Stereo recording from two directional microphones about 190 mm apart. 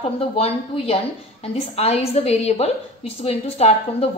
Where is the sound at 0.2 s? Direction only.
30° left (ahead or behind).